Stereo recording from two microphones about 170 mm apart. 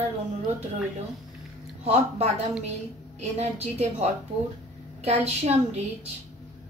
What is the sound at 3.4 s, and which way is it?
A woman's voice, 40° right (ahead or behind).